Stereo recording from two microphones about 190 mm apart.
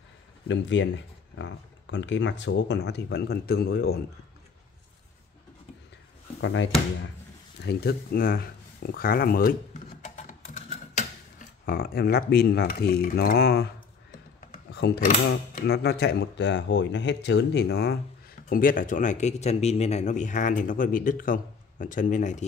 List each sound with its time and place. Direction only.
0.5 s speech: 75° left (ahead or behind); by 4.0 s 55° left (ahead or behind)
6.4 s speech: 85° left
7.6 s speech: 55° left (ahead or behind)
10.0 s a sound: 35° left (ahead or behind); by 13.7 s 55° left (ahead or behind)
14.7 s speech: 60° left (ahead or behind); by 22.4 s 40° left (ahead or behind)